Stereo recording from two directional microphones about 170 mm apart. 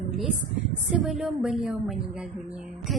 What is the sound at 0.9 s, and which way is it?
A woman's voice, centre (ahead or behind).